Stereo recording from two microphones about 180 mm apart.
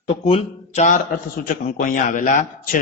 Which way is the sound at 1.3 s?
50° left (ahead or behind).